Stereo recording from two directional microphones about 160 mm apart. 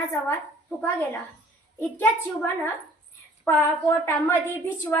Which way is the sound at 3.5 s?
15° left (ahead or behind).